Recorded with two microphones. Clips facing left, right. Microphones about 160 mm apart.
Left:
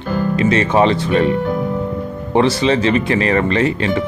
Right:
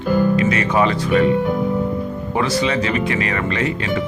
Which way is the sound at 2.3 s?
30° left (ahead or behind).